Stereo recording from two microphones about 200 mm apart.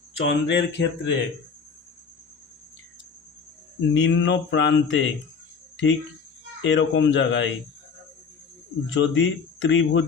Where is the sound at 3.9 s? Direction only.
65° left (ahead or behind).